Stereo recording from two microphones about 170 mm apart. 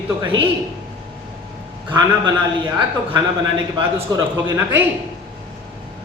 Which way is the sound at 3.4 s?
20° right (ahead or behind).